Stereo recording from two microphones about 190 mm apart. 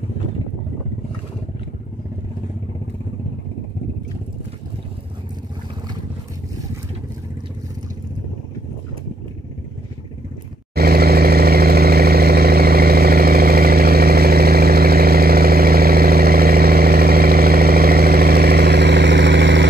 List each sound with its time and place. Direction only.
10.7 s vehicle: 55° right (ahead or behind)